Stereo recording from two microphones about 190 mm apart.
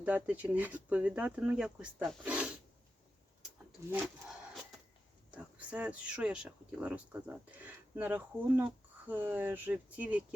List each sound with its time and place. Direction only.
0.0 s speech: 10° right (ahead or behind)
5.3 s speech: 5° right (ahead or behind)